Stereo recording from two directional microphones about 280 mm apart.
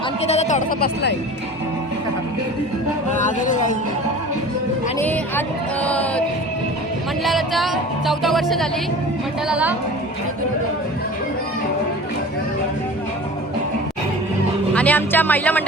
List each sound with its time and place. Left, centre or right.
0.3 s speech: left
3.1 s speech: left
4.9 s a woman's voice: centre
5.8 s music: centre
7.3 s music: centre
14.8 s music: centre